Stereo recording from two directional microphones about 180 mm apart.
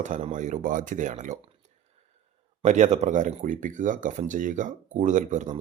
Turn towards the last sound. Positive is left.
turn(degrees=-40)  # may be behind; listen again after turning